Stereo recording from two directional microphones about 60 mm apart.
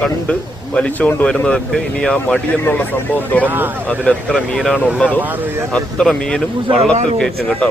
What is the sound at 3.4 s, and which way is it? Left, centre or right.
Speech, right.